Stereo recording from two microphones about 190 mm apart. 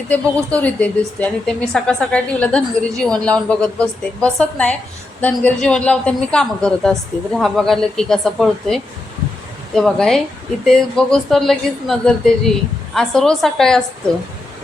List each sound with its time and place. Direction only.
0.1 s a woman's voice: 5° left (ahead or behind)